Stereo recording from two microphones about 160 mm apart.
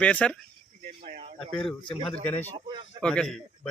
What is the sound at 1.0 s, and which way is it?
Speech, 55° right (ahead or behind).